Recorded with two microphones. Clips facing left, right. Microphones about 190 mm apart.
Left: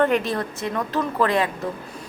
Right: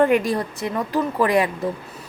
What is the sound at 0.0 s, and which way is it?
A woman's voice, 15° right (ahead or behind).